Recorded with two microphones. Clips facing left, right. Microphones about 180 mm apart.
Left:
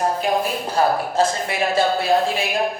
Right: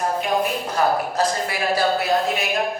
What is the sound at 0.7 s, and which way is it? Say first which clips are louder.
Speech: left 3 dB; 25° left (ahead or behind).